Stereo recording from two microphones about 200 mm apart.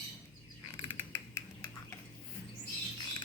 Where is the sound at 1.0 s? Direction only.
15° left (ahead or behind).